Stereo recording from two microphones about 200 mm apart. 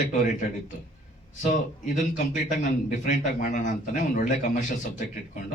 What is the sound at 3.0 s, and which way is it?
A man's voice, 40° left (ahead or behind).